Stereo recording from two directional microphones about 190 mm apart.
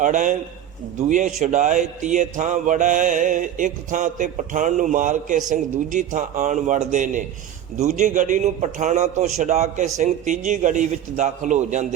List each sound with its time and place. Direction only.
0.0 s mantra: 40° right (ahead or behind)